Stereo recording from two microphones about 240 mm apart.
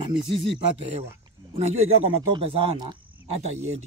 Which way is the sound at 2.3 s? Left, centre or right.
Right.